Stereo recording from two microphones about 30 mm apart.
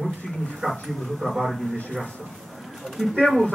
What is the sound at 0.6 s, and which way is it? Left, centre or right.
Speech, right.